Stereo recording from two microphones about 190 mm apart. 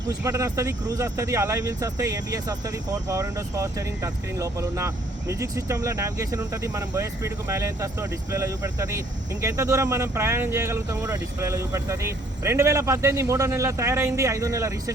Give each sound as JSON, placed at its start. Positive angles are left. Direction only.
{"t": 0.1, "sound": "speech", "side_deg": -15}